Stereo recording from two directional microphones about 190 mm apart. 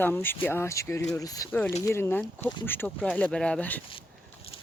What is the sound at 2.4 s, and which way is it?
Speech, 25° left (ahead or behind).